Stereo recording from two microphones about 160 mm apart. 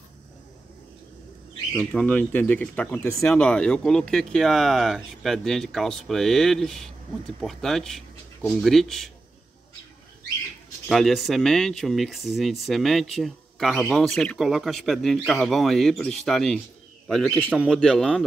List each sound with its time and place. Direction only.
1.9 s speech: 10° left (ahead or behind)
3.0 s speech: 20° left (ahead or behind)
3.3 s speech: 5° left (ahead or behind)
10.9 s speech: centre (ahead or behind)